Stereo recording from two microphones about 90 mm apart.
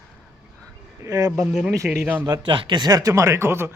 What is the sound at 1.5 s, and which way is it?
Speech, 5° right (ahead or behind).